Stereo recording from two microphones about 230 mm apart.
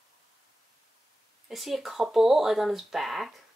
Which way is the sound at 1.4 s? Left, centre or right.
Centre.